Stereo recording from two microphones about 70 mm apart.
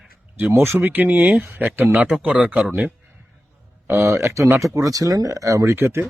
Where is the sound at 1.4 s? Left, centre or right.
Right.